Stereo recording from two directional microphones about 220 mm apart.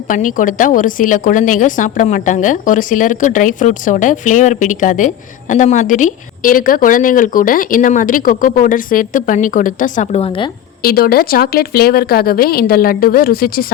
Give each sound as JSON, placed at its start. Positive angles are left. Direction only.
{"t": 0.1, "sound": "a woman's voice", "side_deg": 35}
{"t": 10.8, "sound": "a woman's voice", "side_deg": 45}